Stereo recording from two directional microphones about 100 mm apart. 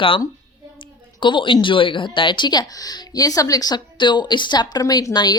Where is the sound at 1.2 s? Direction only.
55° left (ahead or behind).